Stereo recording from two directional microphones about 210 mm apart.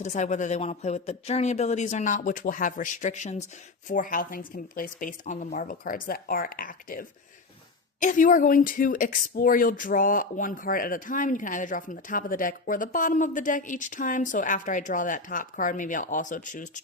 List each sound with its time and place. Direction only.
0.0 s speech: 35° left (ahead or behind)